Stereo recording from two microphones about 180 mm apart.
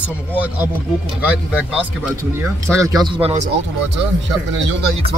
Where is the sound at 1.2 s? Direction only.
5° right (ahead or behind).